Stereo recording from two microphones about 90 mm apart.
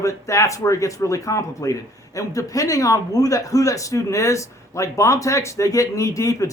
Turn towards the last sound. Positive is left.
turn(degrees=35)  # may be behind; listen again after turning